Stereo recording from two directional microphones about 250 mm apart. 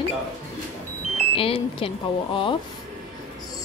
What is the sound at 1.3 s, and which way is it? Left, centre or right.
A woman's voice, left.